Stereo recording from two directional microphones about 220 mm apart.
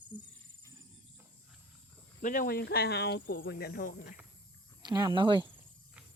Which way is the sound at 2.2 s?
35° left (ahead or behind).